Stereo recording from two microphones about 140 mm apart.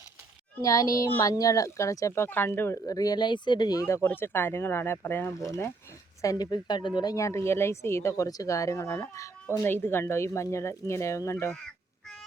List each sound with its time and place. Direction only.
0.6 s speech: 25° left (ahead or behind)
11.5 s crow: 5° left (ahead or behind)